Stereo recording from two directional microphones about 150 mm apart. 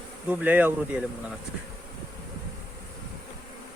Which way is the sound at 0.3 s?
10° right (ahead or behind).